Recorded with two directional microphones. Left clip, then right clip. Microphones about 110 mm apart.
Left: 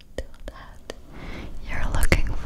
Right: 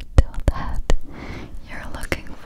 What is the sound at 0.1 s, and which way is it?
Whispering, 35° right (ahead or behind).